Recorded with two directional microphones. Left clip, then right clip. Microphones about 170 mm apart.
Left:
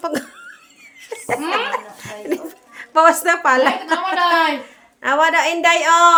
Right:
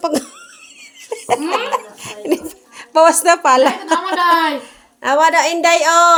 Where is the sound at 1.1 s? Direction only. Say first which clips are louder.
Right 3 dB; 35° right (ahead or behind).